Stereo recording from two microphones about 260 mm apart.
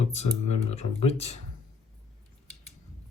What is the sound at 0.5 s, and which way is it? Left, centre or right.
Speech, left.